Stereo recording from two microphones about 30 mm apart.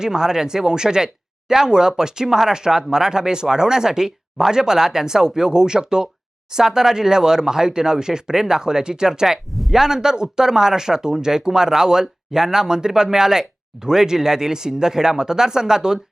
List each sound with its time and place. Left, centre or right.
0.0 s speech: centre
9.6 s speech: centre
9.8 s speech: centre